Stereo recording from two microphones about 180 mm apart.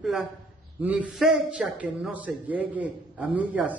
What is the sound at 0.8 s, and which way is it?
A man's voice, 10° right (ahead or behind).